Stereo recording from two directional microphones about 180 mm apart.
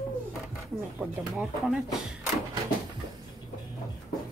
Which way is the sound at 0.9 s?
5° right (ahead or behind).